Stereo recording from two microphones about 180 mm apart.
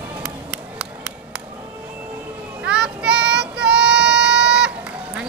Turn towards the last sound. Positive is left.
turn(degrees=-5)  # may be behind; listen again after turning